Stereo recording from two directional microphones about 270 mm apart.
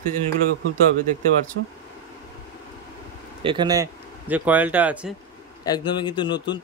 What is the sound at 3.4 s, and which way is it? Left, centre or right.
Speech, centre.